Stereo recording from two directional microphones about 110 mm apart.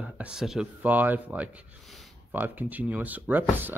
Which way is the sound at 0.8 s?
15° right (ahead or behind).